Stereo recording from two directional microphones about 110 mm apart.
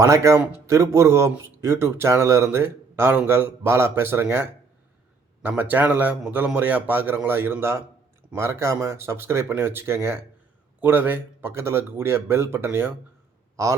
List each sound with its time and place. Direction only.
0.0 s a man's voice: 30° right (ahead or behind)